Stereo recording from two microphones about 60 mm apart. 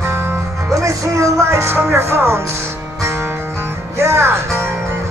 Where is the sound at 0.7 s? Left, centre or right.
Right.